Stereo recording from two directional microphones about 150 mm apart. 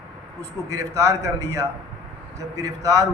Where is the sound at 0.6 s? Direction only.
20° right (ahead or behind).